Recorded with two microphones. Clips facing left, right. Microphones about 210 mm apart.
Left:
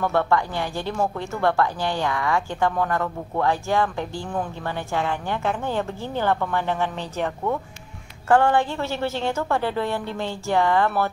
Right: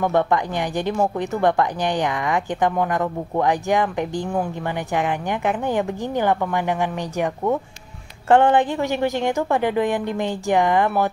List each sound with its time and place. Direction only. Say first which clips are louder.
0.0 s speech: right 2 dB; 15° right (ahead or behind)